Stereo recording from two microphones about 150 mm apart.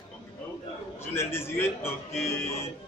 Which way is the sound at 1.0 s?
15° left (ahead or behind).